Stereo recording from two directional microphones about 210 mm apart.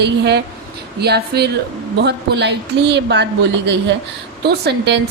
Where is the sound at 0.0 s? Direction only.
55° right (ahead or behind).